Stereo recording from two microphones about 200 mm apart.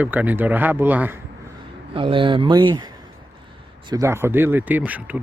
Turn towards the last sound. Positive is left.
turn(degrees=-10)  # may be behind; listen again after turning